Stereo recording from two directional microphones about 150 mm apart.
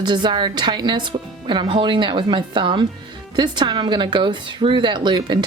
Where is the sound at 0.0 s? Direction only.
30° right (ahead or behind).